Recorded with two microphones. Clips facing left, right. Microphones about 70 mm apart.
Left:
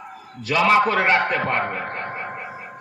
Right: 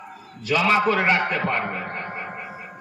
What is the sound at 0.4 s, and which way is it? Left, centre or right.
A man's voice, left.